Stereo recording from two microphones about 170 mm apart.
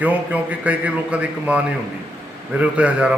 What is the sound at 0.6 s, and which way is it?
A man's voice, 10° right (ahead or behind).